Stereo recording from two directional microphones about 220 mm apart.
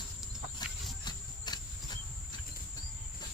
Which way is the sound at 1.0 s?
20° left (ahead or behind).